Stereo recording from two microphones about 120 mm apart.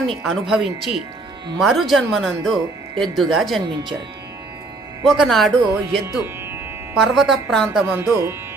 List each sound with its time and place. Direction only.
0.1 s speech: centre (ahead or behind)
5.0 s speech: centre (ahead or behind)
7.0 s speech: centre (ahead or behind)
7.9 s speech: 20° right (ahead or behind)